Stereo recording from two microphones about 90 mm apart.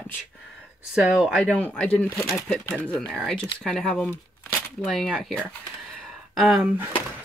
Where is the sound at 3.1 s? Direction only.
5° left (ahead or behind).